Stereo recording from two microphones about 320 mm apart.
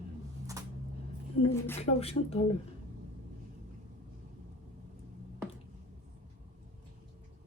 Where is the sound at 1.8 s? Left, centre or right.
Centre.